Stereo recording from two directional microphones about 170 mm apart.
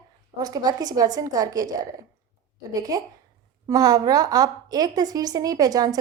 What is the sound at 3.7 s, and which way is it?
A woman's voice, 20° right (ahead or behind).